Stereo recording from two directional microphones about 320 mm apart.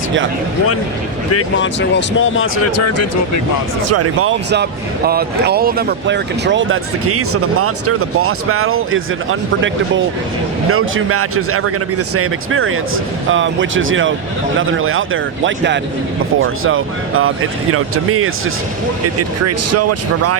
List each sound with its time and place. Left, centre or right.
1.3 s speech: left
3.8 s speech: right